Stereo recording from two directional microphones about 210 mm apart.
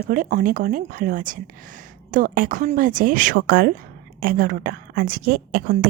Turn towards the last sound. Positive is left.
turn(degrees=-45)  # may be behind; listen again after turning